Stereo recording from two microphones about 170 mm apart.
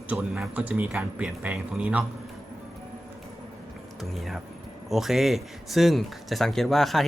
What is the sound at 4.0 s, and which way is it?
Speech, centre (ahead or behind).